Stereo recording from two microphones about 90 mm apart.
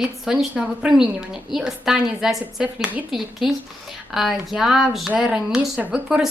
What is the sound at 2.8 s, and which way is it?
Speech, 20° right (ahead or behind).